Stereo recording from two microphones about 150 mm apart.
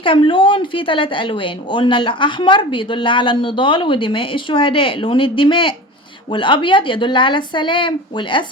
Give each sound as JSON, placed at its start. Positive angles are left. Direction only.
{"t": 0.0, "sound": "a woman's voice", "side_deg": 35}